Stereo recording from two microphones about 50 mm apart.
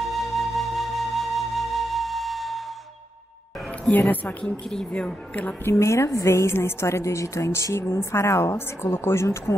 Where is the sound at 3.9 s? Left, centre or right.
Left.